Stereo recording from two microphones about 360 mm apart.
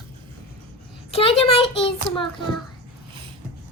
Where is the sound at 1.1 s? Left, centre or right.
Centre.